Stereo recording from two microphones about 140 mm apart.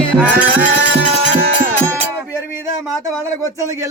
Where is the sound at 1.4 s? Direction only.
80° right.